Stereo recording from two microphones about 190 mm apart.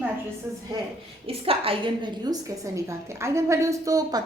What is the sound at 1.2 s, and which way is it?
A woman's voice, 30° right (ahead or behind).